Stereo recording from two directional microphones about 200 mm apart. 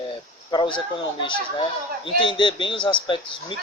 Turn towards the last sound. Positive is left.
turn(degrees=25)  # may be behind; listen again after turning